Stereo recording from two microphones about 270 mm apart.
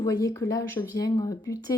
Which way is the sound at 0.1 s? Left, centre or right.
Centre.